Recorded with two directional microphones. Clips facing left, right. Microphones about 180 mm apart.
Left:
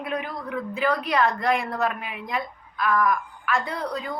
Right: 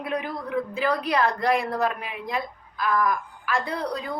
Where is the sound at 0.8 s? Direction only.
35° right (ahead or behind).